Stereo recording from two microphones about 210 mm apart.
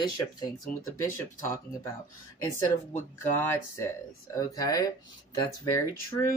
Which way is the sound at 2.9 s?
10° left (ahead or behind).